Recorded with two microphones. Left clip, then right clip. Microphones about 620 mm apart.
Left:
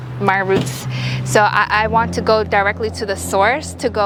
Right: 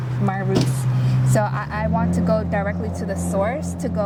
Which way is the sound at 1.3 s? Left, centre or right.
Left.